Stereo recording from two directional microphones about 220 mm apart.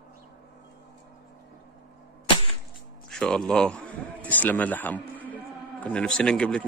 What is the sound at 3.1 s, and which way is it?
A man's voice, 5° left (ahead or behind).